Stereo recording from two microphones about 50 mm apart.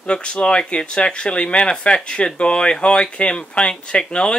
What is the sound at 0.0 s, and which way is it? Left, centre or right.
Speech, centre.